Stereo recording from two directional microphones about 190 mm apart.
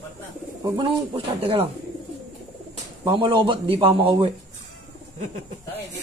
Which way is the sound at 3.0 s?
25° right (ahead or behind).